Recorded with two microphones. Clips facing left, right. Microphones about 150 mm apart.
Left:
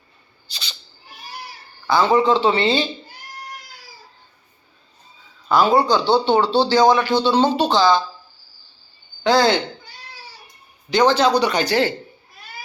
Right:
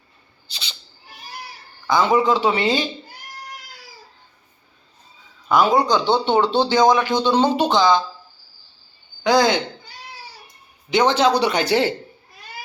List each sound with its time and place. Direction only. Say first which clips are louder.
1.9 s speech: left 1 dB; 15° right (ahead or behind)
5.5 s speech: even; centre (ahead or behind)
5.7 s speech: left 1 dB; 15° right (ahead or behind)
9.2 s speech: left 1 dB; 15° right (ahead or behind)
10.8 s speech: left 1 dB; 20° right (ahead or behind)